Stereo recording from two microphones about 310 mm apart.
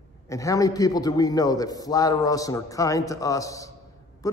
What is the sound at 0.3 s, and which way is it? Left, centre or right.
A man's voice, centre.